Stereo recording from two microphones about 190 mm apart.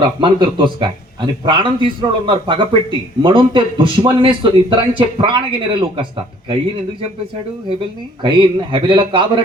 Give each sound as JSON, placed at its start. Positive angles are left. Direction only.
{"t": 0.0, "sound": "a man's voice", "side_deg": -25}
{"t": 8.2, "sound": "a man's voice", "side_deg": -25}